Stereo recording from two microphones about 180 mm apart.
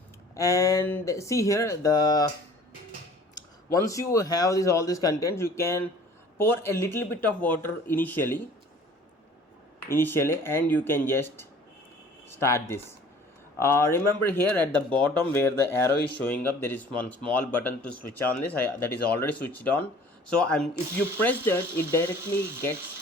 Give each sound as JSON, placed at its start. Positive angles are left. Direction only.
{"t": 0.3, "sound": "speech", "side_deg": 20}
{"t": 3.8, "sound": "speech", "side_deg": 20}
{"t": 9.9, "sound": "speech", "side_deg": 10}